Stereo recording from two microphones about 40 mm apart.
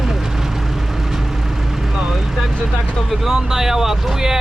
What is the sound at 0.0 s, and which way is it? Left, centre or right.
Vehicle, centre.